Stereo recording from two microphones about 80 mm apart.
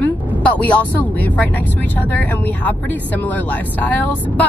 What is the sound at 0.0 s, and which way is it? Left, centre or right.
Speech, centre.